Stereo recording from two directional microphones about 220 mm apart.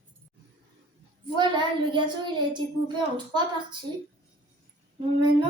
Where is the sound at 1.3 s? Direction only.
20° right (ahead or behind).